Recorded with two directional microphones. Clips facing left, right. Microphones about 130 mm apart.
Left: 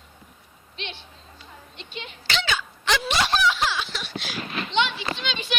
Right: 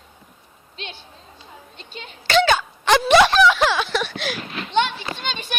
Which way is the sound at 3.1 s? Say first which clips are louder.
Right 10 dB; 65° right (ahead or behind).